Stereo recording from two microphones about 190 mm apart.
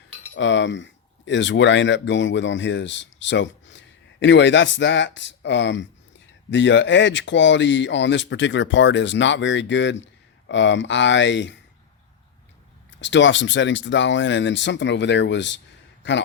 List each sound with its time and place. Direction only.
0.3 s speech: 75° left (ahead or behind)
13.0 s speech: 70° left (ahead or behind)